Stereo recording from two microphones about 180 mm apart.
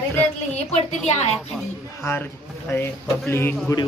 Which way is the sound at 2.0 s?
10° left (ahead or behind).